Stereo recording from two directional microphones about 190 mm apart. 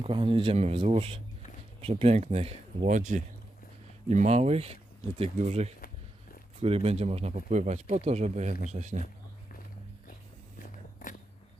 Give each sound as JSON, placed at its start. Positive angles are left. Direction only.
{"t": 0.0, "sound": "speech", "side_deg": -30}
{"t": 10.6, "sound": "biting", "side_deg": 45}